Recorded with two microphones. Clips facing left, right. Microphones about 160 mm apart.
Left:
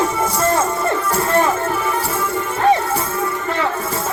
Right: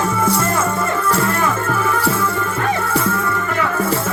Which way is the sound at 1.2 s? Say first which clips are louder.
Left 2 dB; 25° left (ahead or behind).